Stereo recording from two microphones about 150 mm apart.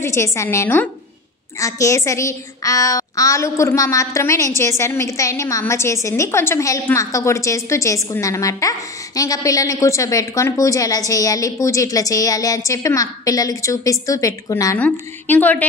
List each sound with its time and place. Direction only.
0.0 s a woman's voice: 20° left (ahead or behind)
14.8 s a woman's voice: 10° left (ahead or behind)